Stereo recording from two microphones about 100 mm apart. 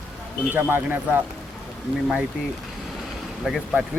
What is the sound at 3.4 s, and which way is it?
Speech, centre (ahead or behind).